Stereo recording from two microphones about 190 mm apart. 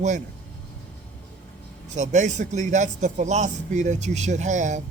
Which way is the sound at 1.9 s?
40° right (ahead or behind).